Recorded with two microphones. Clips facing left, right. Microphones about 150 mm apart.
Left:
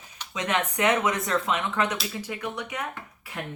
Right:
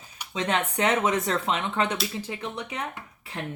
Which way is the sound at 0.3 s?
30° right (ahead or behind).